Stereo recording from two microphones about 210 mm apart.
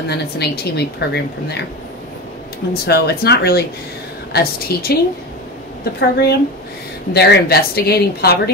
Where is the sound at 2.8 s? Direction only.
50° left (ahead or behind).